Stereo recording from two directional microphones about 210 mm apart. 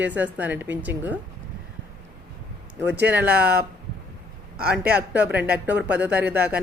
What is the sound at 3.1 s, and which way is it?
Speech, 5° right (ahead or behind).